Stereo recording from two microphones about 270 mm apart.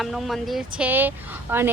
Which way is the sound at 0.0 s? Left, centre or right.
Centre.